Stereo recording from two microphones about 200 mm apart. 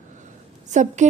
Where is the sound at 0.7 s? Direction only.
35° right (ahead or behind).